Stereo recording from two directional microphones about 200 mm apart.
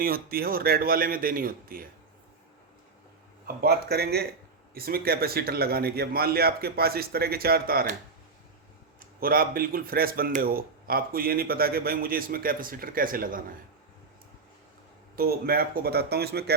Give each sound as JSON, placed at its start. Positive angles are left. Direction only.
{"t": 0.0, "sound": "speech", "side_deg": -50}
{"t": 3.4, "sound": "speech", "side_deg": -50}
{"t": 9.0, "sound": "speech", "side_deg": -45}
{"t": 15.1, "sound": "speech", "side_deg": -50}